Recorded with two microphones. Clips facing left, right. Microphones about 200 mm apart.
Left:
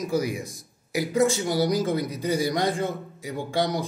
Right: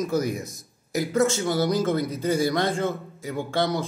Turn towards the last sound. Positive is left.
turn(degrees=15)  # may be behind; listen again after turning